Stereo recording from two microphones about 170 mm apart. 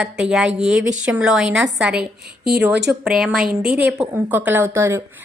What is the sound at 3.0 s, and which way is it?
A woman's voice, 5° right (ahead or behind).